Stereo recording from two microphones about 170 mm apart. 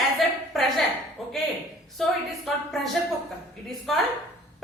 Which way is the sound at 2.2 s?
Centre (ahead or behind).